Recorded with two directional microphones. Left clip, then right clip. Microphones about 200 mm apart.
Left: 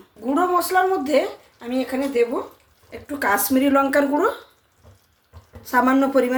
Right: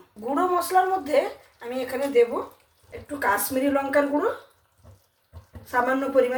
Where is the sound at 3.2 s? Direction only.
45° left (ahead or behind).